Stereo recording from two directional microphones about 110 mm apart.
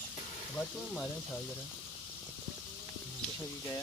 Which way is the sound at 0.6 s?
10° left (ahead or behind).